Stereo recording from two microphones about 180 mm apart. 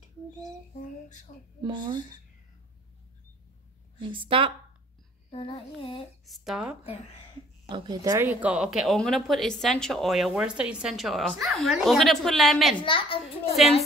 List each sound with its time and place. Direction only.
1.0 s speech: 45° left (ahead or behind)
1.6 s a woman's voice: 25° right (ahead or behind)
4.0 s a woman's voice: 30° right (ahead or behind)
5.3 s a child's voice: 30° left (ahead or behind)
6.2 s a woman's voice: centre (ahead or behind)
7.6 s a woman's voice: 25° right (ahead or behind); by 12.7 s centre (ahead or behind)
12.8 s a child's voice: 30° left (ahead or behind)